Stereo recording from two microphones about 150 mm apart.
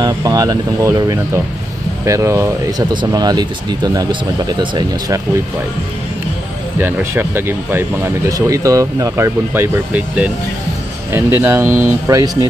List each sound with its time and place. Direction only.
0.0 s speech: 25° right (ahead or behind)
6.8 s speech: 15° right (ahead or behind)